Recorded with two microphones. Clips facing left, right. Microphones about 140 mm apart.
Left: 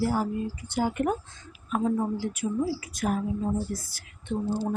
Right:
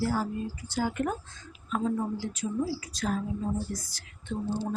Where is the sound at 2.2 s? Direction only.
60° left (ahead or behind).